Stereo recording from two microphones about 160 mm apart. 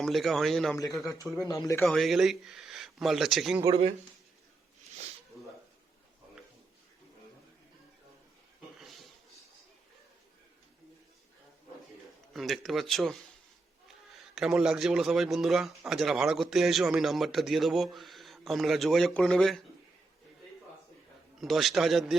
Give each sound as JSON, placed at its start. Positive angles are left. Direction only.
{"t": 0.0, "sound": "a man's voice", "side_deg": 0}
{"t": 1.4, "sound": "speech", "side_deg": 20}
{"t": 1.8, "sound": "a man's voice", "side_deg": 0}
{"t": 8.8, "sound": "a sound", "side_deg": 0}
{"t": 12.3, "sound": "a man's voice", "side_deg": 0}
{"t": 14.3, "sound": "a man's voice", "side_deg": -5}
{"t": 21.4, "sound": "a man's voice", "side_deg": 0}